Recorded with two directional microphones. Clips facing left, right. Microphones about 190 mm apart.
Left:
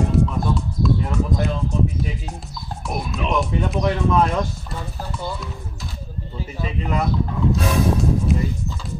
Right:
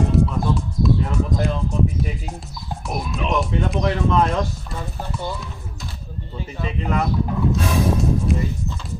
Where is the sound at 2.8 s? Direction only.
Centre (ahead or behind).